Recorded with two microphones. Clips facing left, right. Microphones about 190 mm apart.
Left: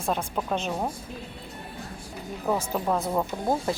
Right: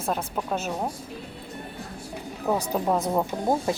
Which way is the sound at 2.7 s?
15° right (ahead or behind).